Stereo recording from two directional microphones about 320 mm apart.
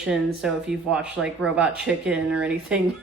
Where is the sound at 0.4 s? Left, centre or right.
Centre.